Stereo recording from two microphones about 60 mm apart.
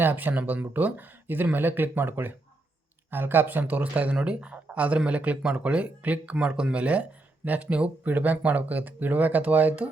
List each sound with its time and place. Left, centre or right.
0.0 s speech: right